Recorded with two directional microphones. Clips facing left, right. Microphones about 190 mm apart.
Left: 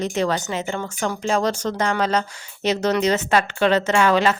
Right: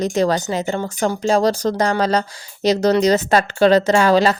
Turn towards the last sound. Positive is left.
turn(degrees=-35)  # may be behind; listen again after turning